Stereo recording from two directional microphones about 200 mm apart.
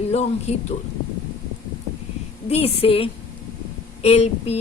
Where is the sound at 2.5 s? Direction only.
30° left (ahead or behind).